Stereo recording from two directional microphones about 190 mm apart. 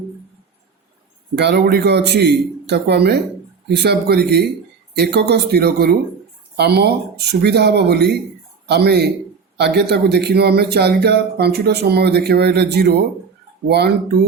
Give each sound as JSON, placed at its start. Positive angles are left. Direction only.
{"t": 1.4, "sound": "a man's voice", "side_deg": -60}